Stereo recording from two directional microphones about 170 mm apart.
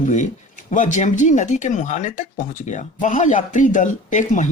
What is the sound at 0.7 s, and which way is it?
Speech, 45° left (ahead or behind).